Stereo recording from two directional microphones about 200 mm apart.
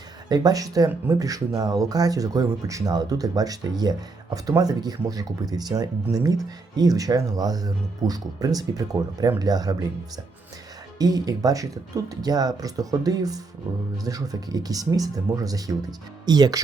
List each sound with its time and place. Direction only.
0.3 s speech: 20° right (ahead or behind)
10.9 s speech: 20° right (ahead or behind)